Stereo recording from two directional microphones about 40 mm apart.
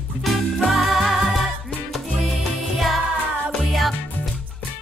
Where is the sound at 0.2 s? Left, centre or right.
Centre.